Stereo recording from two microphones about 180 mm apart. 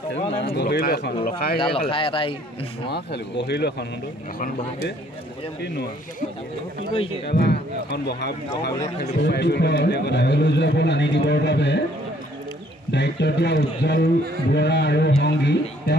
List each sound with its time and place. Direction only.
0.4 s a man's voice: 65° left (ahead or behind)
1.6 s speech: 30° left (ahead or behind)
2.9 s a man's voice: 65° left (ahead or behind)
7.2 s a man's voice: 65° left (ahead or behind)
12.9 s a man's voice: 70° left (ahead or behind)